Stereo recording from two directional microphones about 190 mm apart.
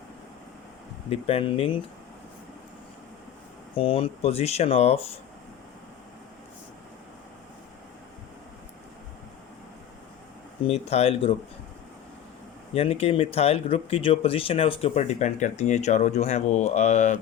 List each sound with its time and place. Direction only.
1.1 s speech: 30° left (ahead or behind)
3.8 s speech: 30° left (ahead or behind)
10.6 s speech: 35° left (ahead or behind)
12.7 s speech: 30° left (ahead or behind)